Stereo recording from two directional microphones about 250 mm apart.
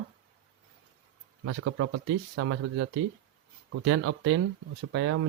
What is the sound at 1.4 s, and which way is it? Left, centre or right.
Speech, right.